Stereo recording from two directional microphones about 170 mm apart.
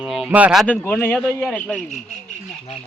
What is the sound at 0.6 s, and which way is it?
Speech, 5° left (ahead or behind).